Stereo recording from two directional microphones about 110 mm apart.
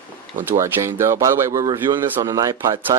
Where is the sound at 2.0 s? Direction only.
20° right (ahead or behind).